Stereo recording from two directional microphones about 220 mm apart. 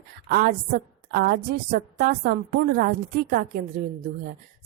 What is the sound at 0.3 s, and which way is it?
A woman's voice, 45° right (ahead or behind).